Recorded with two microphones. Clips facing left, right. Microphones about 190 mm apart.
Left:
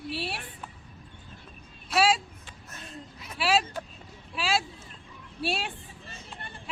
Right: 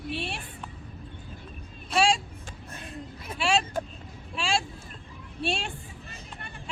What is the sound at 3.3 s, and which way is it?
Speech, 5° left (ahead or behind).